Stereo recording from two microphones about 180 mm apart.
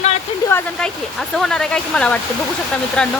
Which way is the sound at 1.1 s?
Centre (ahead or behind).